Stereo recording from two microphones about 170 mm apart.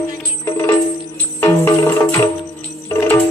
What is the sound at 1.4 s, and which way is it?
Music, 15° left (ahead or behind).